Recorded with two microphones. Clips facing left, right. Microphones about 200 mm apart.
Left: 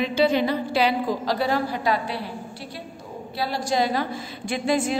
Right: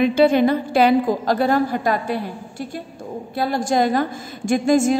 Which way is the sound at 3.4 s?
50° right (ahead or behind).